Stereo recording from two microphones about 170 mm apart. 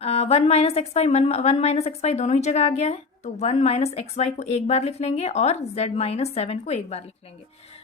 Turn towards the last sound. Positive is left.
turn(degrees=35)  # may be behind; listen again after turning